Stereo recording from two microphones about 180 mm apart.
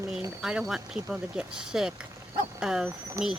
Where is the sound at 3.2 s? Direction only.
15° right (ahead or behind).